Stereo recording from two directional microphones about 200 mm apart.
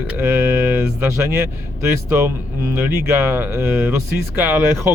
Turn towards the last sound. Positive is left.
turn(degrees=-10)  # may be behind; listen again after turning